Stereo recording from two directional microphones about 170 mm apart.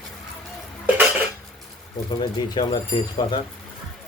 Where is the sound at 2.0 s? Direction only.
25° left (ahead or behind).